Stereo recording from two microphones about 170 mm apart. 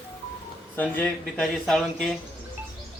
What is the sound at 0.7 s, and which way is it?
A man's voice, 10° left (ahead or behind).